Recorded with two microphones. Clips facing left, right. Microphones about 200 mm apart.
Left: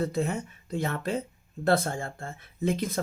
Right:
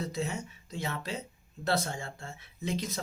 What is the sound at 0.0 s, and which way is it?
Speech, 55° left (ahead or behind).